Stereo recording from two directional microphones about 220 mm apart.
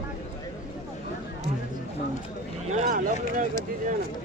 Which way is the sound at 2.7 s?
35° right (ahead or behind).